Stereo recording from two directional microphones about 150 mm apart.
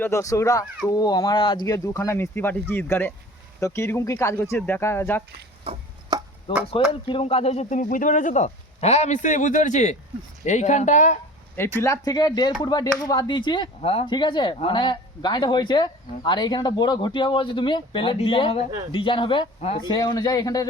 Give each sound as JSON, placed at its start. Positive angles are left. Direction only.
{"t": 0.0, "sound": "speech", "side_deg": 20}
{"t": 5.7, "sound": "tick-tock", "side_deg": -40}
{"t": 6.1, "sound": "chop", "side_deg": -25}
{"t": 6.5, "sound": "speech", "side_deg": 35}
{"t": 11.8, "sound": "speech", "side_deg": 25}